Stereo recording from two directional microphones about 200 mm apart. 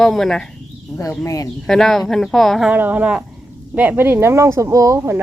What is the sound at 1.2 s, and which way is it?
Speech, 15° left (ahead or behind).